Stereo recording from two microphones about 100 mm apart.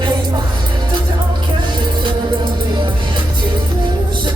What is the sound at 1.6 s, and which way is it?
Music, 55° right (ahead or behind).